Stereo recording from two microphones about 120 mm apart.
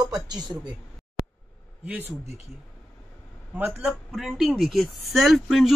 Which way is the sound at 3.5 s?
20° right (ahead or behind).